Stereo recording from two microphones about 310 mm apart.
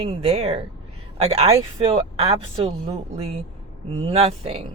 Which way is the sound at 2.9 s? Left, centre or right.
Centre.